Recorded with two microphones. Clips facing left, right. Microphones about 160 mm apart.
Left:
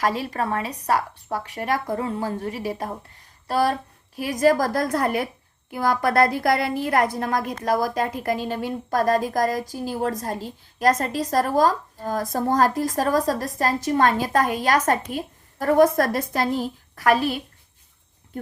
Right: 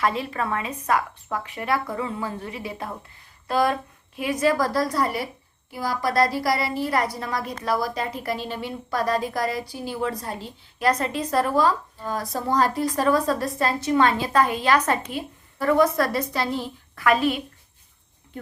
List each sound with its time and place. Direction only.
0.2 s a woman's voice: 40° left (ahead or behind)